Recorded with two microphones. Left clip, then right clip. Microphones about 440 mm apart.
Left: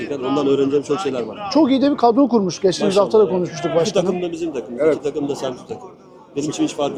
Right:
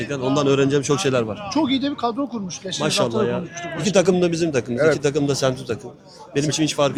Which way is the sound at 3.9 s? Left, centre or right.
Right.